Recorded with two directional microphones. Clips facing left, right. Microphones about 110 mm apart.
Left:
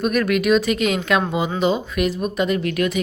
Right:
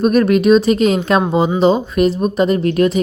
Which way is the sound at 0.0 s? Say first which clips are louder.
Right 7 dB; 30° right (ahead or behind).